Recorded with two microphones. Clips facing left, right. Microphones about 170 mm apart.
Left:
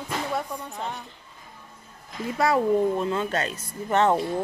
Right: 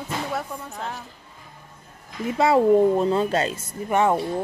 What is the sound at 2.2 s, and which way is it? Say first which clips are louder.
Speech: right 4 dB; 25° right (ahead or behind).